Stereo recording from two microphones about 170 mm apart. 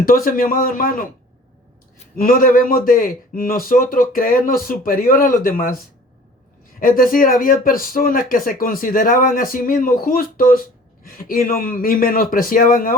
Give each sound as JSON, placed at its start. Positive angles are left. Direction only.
{"t": 0.0, "sound": "speech", "side_deg": 55}
{"t": 2.1, "sound": "speech", "side_deg": 55}